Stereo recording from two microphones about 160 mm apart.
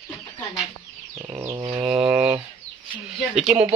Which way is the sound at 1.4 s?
15° right (ahead or behind).